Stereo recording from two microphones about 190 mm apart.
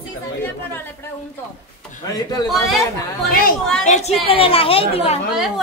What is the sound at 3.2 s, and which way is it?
Speech, 50° left (ahead or behind).